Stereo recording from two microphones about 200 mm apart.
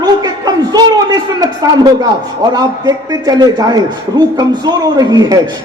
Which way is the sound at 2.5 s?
20° right (ahead or behind).